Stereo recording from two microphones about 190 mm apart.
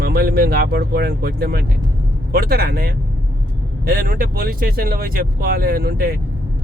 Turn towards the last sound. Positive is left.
turn(degrees=-55)  # may be behind; listen again after turning